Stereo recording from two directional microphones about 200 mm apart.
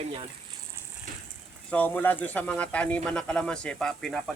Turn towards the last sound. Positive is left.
turn(degrees=5)  # may be behind; listen again after turning